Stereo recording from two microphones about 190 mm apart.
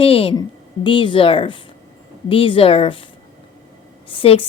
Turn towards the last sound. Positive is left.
turn(degrees=30)  # may be behind; listen again after turning